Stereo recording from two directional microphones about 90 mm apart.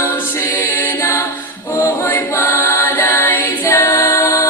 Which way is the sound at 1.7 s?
30° left (ahead or behind).